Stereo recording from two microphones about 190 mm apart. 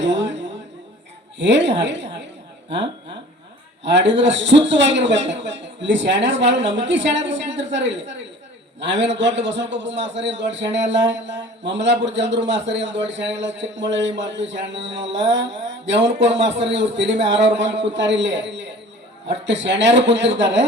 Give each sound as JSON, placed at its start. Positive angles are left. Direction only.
{"t": 0.0, "sound": "a sound", "side_deg": -70}
{"t": 1.4, "sound": "a man's voice", "side_deg": -70}
{"t": 3.8, "sound": "a man's voice", "side_deg": -70}